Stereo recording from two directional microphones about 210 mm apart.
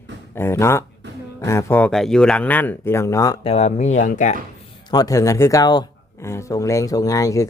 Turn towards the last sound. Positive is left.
turn(degrees=15)  # may be behind; listen again after turning